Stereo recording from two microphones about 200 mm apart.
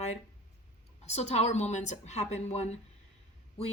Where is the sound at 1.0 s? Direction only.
30° left (ahead or behind).